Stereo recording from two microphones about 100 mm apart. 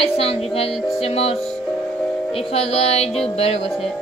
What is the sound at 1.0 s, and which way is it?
Speech, 90° left.